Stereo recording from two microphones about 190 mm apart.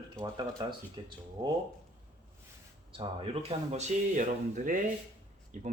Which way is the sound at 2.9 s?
30° right (ahead or behind).